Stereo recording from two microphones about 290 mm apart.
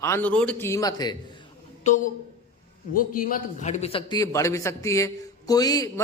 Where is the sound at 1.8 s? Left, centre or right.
Left.